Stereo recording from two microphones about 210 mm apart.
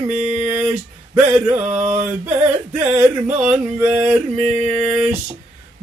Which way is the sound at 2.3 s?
30° right (ahead or behind).